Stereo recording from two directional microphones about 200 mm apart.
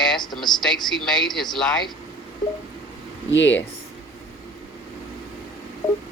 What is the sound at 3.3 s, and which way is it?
Speech, 65° left (ahead or behind).